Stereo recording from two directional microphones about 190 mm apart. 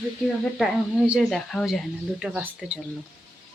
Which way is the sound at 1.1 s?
Centre (ahead or behind).